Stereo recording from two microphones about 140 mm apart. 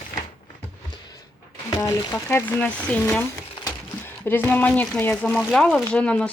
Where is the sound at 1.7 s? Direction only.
25° left (ahead or behind).